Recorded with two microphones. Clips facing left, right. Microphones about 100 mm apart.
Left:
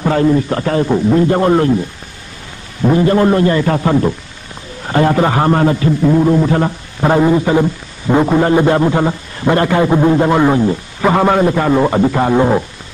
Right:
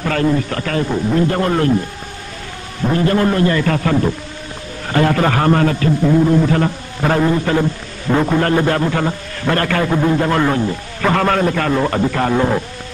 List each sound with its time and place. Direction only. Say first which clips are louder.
0.0 s a man's voice: left 4 dB; 20° left (ahead or behind)
2.9 s a man's voice: left 4 dB; 25° left (ahead or behind)